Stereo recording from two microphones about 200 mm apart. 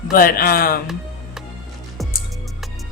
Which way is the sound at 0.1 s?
45° left (ahead or behind).